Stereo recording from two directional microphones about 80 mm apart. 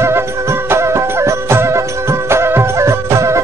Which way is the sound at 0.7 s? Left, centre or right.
Right.